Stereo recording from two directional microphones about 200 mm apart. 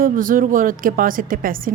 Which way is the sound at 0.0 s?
45° right (ahead or behind).